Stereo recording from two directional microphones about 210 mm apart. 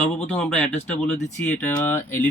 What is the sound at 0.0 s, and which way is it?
Speech, 5° left (ahead or behind).